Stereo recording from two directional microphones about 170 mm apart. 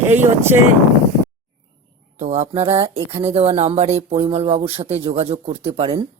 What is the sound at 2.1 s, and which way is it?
Speech, 45° right (ahead or behind).